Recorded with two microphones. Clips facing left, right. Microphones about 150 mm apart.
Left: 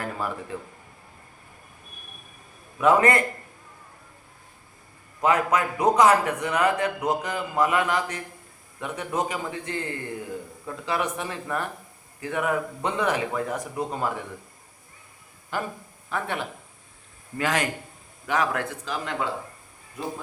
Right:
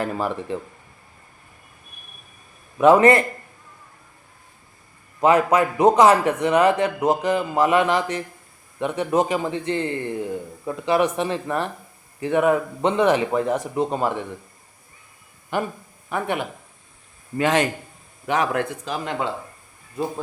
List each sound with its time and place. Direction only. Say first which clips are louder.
0.0 s a man's voice: right 6 dB; 25° right (ahead or behind)
2.8 s a man's voice: right 6 dB; 25° right (ahead or behind)
5.2 s a man's voice: right 5 dB; 25° right (ahead or behind)
15.5 s a man's voice: right 5 dB; 20° right (ahead or behind)